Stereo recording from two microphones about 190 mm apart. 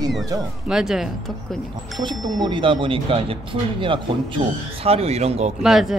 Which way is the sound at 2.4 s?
25° right (ahead or behind).